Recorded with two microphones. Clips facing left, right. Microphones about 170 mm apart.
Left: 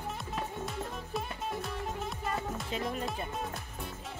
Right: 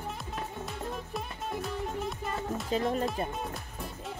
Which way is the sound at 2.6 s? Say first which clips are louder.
Right 10 dB; 35° right (ahead or behind).